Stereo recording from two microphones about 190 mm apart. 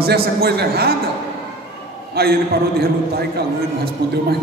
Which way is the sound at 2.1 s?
55° right (ahead or behind).